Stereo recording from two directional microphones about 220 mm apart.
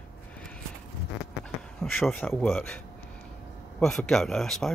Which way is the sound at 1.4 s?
5° left (ahead or behind).